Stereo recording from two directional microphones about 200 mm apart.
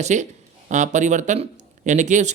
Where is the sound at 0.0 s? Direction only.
35° right (ahead or behind).